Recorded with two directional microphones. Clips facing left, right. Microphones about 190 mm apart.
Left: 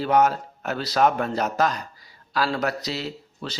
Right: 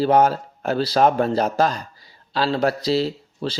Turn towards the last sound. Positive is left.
turn(degrees=-30)  # may be behind; listen again after turning